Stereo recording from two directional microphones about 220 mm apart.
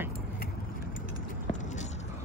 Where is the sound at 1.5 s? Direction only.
35° left (ahead or behind).